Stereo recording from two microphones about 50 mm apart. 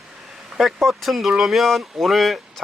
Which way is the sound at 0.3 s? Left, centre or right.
Centre.